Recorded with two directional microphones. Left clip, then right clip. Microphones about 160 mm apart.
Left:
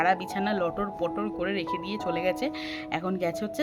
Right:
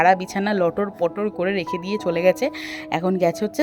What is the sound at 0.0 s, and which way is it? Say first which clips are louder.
Speech: right 8 dB; 45° right (ahead or behind).